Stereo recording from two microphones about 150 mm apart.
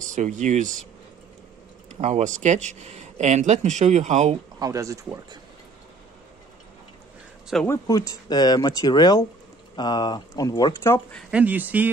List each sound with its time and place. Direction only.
0.0 s speech: 55° right (ahead or behind)
1.9 s speech: 45° right (ahead or behind)
4.6 s speech: 20° right (ahead or behind)
7.6 s speech: 20° left (ahead or behind)
11.1 s speech: 5° left (ahead or behind)
11.3 s speech: 10° right (ahead or behind)